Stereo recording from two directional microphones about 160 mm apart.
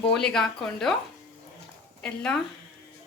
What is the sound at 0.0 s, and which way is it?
Speech, 5° left (ahead or behind).